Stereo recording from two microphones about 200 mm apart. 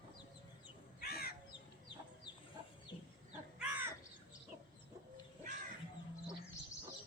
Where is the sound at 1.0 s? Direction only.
50° left (ahead or behind).